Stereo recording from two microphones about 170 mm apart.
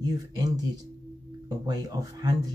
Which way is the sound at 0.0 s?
20° right (ahead or behind).